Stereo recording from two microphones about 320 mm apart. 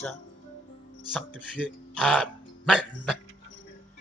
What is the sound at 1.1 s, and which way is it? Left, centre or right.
Speech, centre.